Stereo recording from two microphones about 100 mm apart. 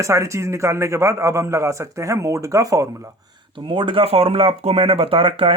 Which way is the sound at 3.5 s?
55° right (ahead or behind).